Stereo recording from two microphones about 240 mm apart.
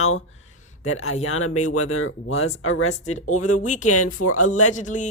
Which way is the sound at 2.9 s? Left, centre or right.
Left.